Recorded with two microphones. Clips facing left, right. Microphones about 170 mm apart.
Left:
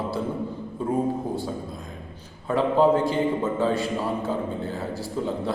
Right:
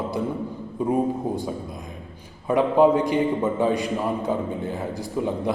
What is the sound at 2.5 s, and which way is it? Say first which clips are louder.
A man's voice: right 2 dB; 15° right (ahead or behind).